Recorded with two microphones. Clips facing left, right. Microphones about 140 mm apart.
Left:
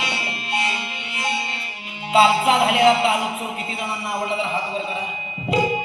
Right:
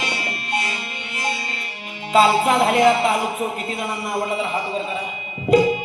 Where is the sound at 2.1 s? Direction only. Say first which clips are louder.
Right 1 dB; 45° right (ahead or behind).